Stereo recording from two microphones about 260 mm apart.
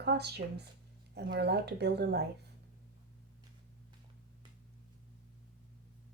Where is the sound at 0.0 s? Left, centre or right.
Right.